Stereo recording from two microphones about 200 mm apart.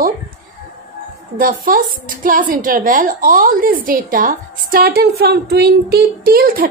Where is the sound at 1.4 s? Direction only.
45° right (ahead or behind).